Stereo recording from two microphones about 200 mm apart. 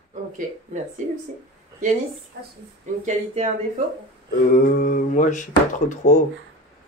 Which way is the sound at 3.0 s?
35° right (ahead or behind).